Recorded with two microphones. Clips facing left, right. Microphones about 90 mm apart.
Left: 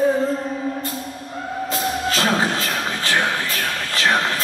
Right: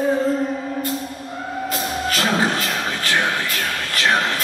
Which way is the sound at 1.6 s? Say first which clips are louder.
Left 2 dB; 25° left (ahead or behind).